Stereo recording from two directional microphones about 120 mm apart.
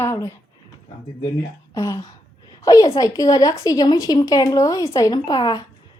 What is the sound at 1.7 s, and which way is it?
Speech, 25° left (ahead or behind).